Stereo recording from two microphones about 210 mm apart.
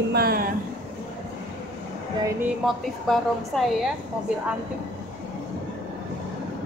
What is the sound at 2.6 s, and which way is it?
A woman's voice, centre (ahead or behind).